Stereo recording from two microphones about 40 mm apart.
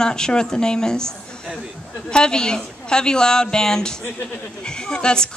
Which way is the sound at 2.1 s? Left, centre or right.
Centre.